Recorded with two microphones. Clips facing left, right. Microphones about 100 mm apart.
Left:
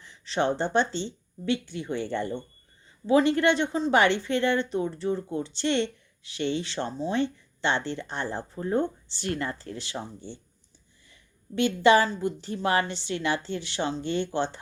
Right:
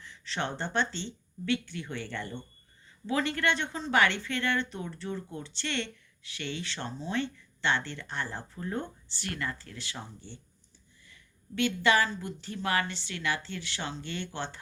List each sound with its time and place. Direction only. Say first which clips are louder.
0.0 s speech: left 8 dB; 20° left (ahead or behind)
11.1 s a sound: left 6 dB; 20° left (ahead or behind)
12.2 s speech: left 7 dB; 20° left (ahead or behind)